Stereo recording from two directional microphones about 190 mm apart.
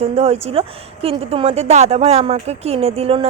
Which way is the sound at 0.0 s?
35° right (ahead or behind).